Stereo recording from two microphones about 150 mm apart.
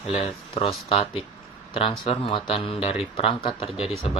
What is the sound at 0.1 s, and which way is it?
Speech, 40° left (ahead or behind).